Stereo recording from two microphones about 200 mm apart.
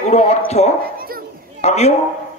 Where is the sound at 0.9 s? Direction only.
45° right (ahead or behind).